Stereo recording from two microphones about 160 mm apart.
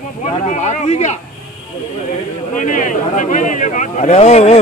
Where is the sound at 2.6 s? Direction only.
50° left (ahead or behind).